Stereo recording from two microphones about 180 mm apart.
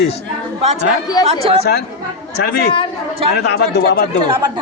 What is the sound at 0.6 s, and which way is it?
Speech, 35° right (ahead or behind).